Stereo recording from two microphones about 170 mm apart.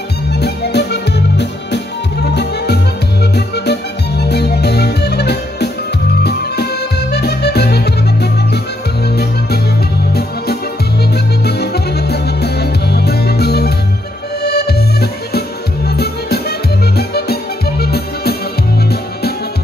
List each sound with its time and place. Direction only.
0.3 s music: 75° left (ahead or behind)
2.3 s music: 75° left (ahead or behind)